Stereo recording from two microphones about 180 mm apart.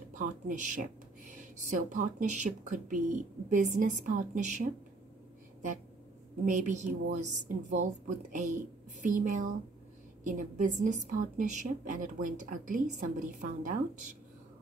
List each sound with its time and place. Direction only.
0.2 s a woman's voice: 45° right (ahead or behind)
6.4 s a woman's voice: 45° right (ahead or behind)